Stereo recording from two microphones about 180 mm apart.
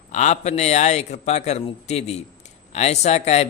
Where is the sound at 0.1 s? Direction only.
40° left (ahead or behind).